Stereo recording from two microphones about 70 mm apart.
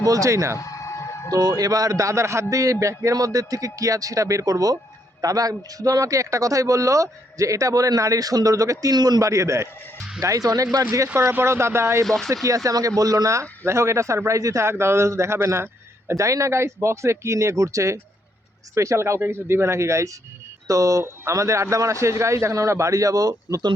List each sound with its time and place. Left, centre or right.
0.0 s a man's voice: right
1.3 s a man's voice: right
9.0 s a man's voice: right
9.3 s a man's voice: right
11.1 s speech: right
12.0 s speech: centre
12.3 s a man's voice: right